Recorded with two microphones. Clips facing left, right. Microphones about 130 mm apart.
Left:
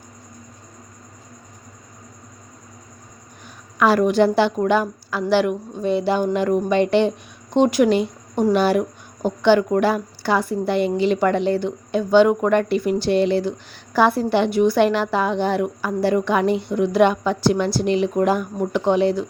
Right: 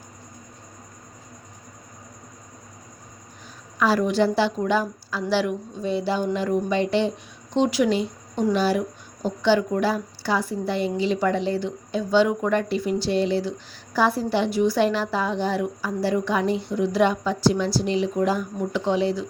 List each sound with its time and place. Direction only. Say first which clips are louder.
3.8 s a woman's voice: left 5 dB; 60° left (ahead or behind)